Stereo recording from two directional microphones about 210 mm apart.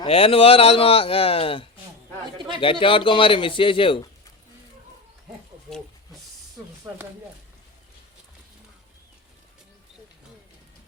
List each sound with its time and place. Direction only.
0.0 s a man's voice: 25° left (ahead or behind)
6.8 s speech: 10° right (ahead or behind)